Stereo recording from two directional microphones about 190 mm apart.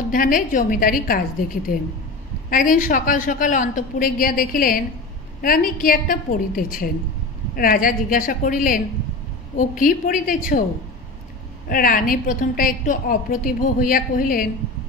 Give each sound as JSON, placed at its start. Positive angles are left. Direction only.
{"t": 0.1, "sound": "a woman's voice", "side_deg": 45}
{"t": 11.7, "sound": "a woman's voice", "side_deg": 50}